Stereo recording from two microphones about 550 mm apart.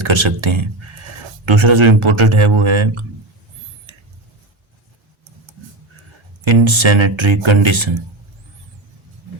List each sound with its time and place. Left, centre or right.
0.0 s speech: right
3.9 s a sound: right
6.4 s speech: right